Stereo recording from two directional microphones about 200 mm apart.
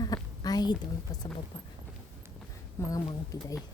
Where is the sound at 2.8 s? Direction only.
15° left (ahead or behind).